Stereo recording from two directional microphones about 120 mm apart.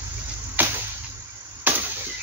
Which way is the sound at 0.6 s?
15° right (ahead or behind).